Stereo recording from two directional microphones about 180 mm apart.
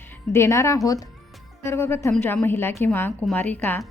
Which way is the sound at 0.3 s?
15° left (ahead or behind).